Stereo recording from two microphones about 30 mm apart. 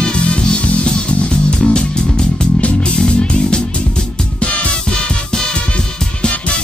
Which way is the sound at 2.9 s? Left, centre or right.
Left.